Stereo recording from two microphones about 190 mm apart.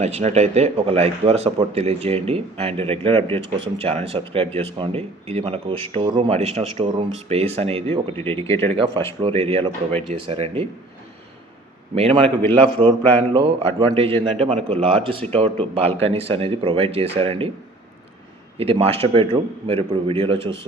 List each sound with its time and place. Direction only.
0.0 s speech: 35° right (ahead or behind)
8.1 s speech: 10° left (ahead or behind)
9.2 s a man's voice: 30° right (ahead or behind)
11.9 s speech: 30° right (ahead or behind)
13.3 s a man's voice: 30° right (ahead or behind)
18.6 s a man's voice: 30° right (ahead or behind)